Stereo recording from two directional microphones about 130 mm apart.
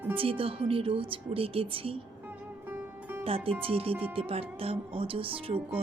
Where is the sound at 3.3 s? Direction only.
45° right (ahead or behind).